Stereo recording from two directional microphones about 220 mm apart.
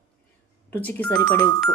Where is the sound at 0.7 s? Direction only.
5° left (ahead or behind).